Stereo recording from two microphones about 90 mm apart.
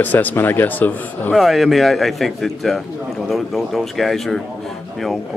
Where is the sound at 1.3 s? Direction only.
Centre (ahead or behind).